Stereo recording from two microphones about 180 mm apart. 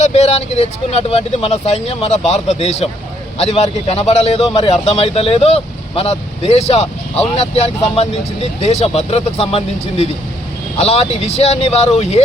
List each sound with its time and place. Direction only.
0.0 s a man's voice: 35° left (ahead or behind)